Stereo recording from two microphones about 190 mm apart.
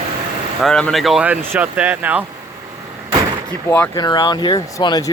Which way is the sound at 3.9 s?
20° left (ahead or behind).